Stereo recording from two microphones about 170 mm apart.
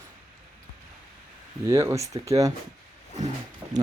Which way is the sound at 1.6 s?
15° right (ahead or behind).